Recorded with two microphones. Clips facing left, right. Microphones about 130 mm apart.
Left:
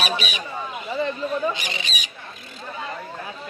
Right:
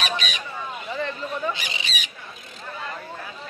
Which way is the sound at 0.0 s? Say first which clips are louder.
Left 2 dB; 10° left (ahead or behind).